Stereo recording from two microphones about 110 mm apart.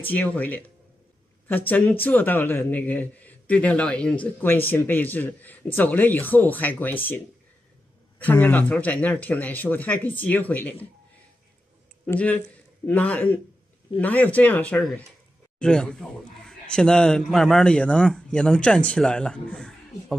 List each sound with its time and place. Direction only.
0.0 s a man's voice: 15° left (ahead or behind)
8.2 s a man's voice: 15° left (ahead or behind)
12.1 s a man's voice: 15° left (ahead or behind)